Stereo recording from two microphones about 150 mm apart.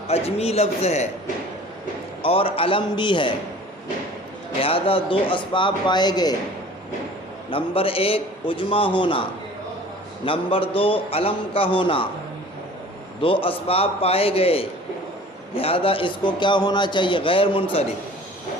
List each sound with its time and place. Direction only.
0.1 s a man's voice: 45° left (ahead or behind)
2.2 s speech: 40° left (ahead or behind)
4.6 s speech: 40° left (ahead or behind)
7.5 s speech: 35° left (ahead or behind)
10.2 s speech: 35° left (ahead or behind)
13.2 s speech: 35° left (ahead or behind)